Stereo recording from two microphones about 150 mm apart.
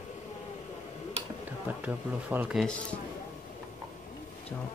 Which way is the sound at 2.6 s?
5° left (ahead or behind).